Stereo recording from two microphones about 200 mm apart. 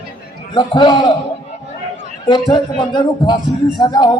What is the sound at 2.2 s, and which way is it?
A man's voice, 20° left (ahead or behind).